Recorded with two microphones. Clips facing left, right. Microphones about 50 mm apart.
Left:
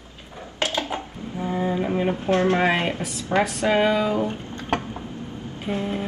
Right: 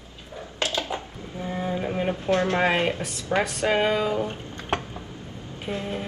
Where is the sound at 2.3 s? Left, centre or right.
Left.